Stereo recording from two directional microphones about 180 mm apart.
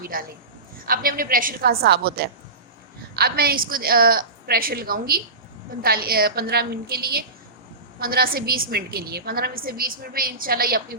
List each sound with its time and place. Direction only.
0.0 s a woman's voice: 55° right (ahead or behind)